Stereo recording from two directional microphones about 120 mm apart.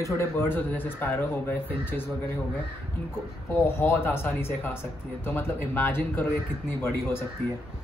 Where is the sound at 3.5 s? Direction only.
20° left (ahead or behind).